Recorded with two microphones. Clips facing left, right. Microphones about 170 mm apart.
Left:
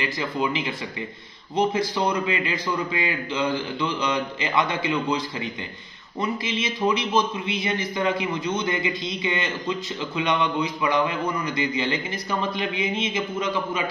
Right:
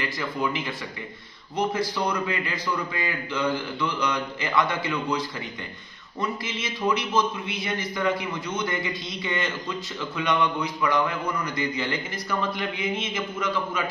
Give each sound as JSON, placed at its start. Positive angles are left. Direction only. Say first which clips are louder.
{"t": 0.0, "sound": "a man's voice", "louder": "left 2 dB", "side_deg": 20}
{"t": 6.4, "sound": "a man's voice", "louder": "left 5 dB", "side_deg": 20}